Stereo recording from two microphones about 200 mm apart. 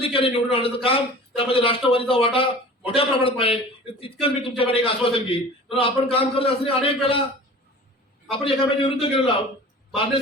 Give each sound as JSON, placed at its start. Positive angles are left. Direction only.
{"t": 0.0, "sound": "a man's voice", "side_deg": 30}
{"t": 8.3, "sound": "a man's voice", "side_deg": 25}